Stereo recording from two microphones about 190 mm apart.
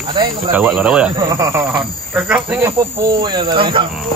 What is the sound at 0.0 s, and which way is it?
Speech, 25° right (ahead or behind).